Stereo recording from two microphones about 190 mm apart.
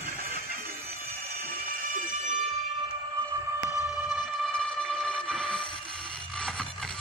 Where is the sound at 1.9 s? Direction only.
45° right (ahead or behind).